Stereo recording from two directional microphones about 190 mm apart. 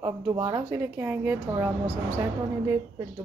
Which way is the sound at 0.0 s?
15° right (ahead or behind).